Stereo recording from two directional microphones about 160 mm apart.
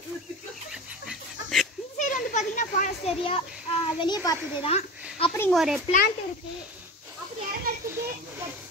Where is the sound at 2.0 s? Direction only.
50° left (ahead or behind).